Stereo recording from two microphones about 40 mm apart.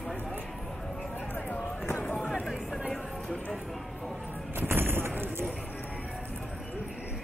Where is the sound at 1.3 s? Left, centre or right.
Left.